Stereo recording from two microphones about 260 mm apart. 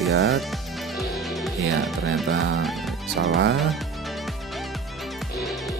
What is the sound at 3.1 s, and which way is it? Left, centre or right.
Speech, right.